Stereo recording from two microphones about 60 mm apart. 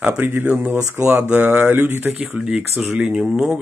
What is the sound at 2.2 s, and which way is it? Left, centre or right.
Speech, centre.